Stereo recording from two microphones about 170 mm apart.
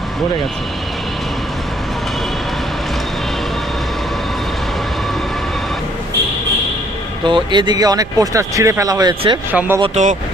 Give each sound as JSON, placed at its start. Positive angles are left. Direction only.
{"t": 7.3, "sound": "speech", "side_deg": -25}
{"t": 9.5, "sound": "speech", "side_deg": -10}
{"t": 9.8, "sound": "speech", "side_deg": -45}